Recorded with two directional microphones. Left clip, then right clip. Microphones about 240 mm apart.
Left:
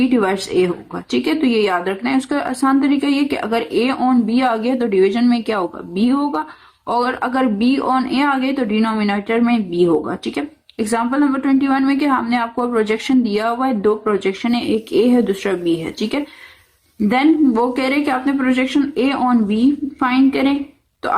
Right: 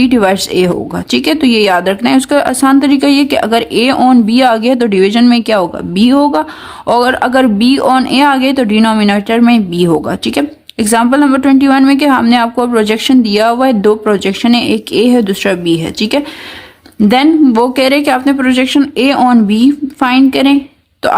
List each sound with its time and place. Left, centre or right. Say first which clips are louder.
0.0 s speech: right 7 dB; right